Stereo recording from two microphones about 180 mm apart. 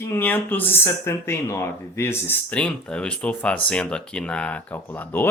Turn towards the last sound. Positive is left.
turn(degrees=10)  # may be behind; listen again after turning